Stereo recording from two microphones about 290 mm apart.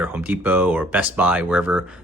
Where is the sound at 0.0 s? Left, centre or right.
Centre.